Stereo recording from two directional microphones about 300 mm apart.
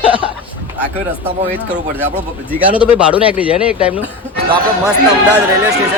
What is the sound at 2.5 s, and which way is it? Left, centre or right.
Speech, centre.